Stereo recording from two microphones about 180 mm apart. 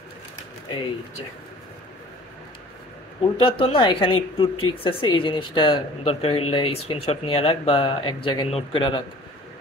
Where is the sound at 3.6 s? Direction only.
30° left (ahead or behind).